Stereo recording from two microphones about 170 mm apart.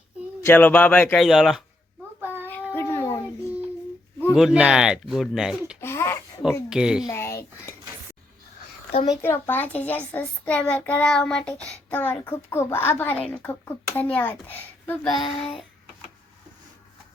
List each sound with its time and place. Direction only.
0.4 s a child's voice: 10° left (ahead or behind)
2.2 s child singing: 10° right (ahead or behind)
2.7 s a sound: 15° left (ahead or behind)
4.4 s speech: 5° right (ahead or behind)
5.8 s a sound: 15° left (ahead or behind)
6.7 s speech: 5° right (ahead or behind)
7.1 s speech: 15° left (ahead or behind)
9.0 s a child's voice: 15° left (ahead or behind)